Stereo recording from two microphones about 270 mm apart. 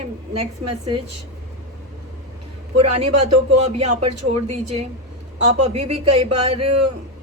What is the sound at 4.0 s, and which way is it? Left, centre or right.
Speech, right.